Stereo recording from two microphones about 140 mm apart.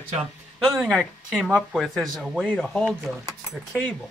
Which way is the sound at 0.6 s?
Centre (ahead or behind).